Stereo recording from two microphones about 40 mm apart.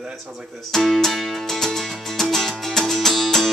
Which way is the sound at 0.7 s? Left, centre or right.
Centre.